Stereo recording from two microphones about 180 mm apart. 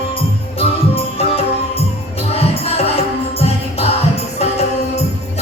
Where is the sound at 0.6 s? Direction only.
30° left (ahead or behind).